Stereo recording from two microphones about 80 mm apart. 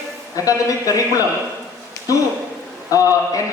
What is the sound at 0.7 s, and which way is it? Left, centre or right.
Speech, left.